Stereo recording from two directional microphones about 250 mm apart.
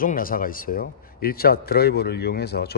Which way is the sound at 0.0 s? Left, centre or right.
Left.